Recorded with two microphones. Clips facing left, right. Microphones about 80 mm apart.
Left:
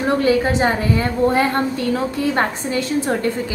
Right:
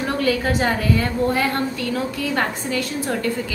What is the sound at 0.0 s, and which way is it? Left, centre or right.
A woman's voice, left.